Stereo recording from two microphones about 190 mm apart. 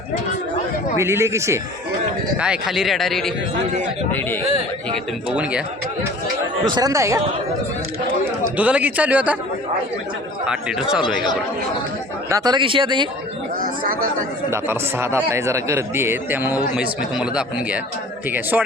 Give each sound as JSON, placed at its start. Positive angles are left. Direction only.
{"t": 0.9, "sound": "a man's voice", "side_deg": -15}
{"t": 2.4, "sound": "speech", "side_deg": -5}
{"t": 5.3, "sound": "a man's voice", "side_deg": -5}
{"t": 6.7, "sound": "a man's voice", "side_deg": -20}
{"t": 8.5, "sound": "a man's voice", "side_deg": -10}
{"t": 10.4, "sound": "speech", "side_deg": -5}
{"t": 12.3, "sound": "speech", "side_deg": -20}
{"t": 14.5, "sound": "a man's voice", "side_deg": -10}